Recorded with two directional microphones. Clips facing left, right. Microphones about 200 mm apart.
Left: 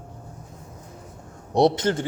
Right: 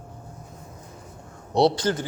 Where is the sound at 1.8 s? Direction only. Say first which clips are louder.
Left 1 dB; 25° left (ahead or behind).